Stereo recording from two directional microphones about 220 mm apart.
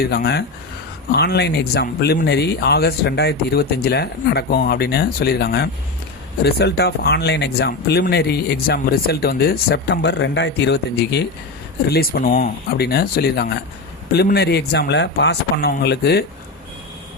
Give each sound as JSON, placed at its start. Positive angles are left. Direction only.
{"t": 0.0, "sound": "speech", "side_deg": 45}